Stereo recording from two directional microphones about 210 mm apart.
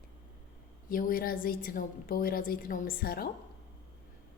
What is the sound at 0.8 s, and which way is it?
A woman's voice, 40° left (ahead or behind).